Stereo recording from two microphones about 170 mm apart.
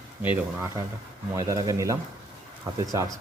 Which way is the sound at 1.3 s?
20° right (ahead or behind).